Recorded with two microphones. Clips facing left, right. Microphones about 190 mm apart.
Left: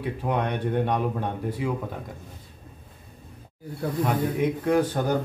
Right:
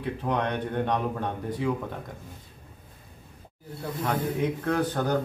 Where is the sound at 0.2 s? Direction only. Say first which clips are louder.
Left 2 dB; 10° left (ahead or behind).